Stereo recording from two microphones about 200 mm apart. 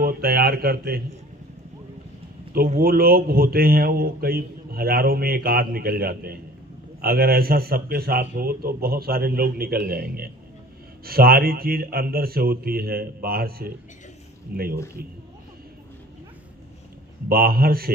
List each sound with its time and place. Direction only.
0.0 s speech: 50° right (ahead or behind)
2.5 s speech: 50° right (ahead or behind)
17.3 s speech: 50° right (ahead or behind)